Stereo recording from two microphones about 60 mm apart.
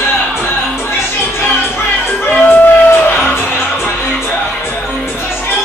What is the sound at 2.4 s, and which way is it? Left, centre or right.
Music, left.